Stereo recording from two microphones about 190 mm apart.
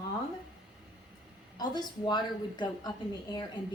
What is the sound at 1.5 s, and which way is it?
A woman's voice, 20° left (ahead or behind).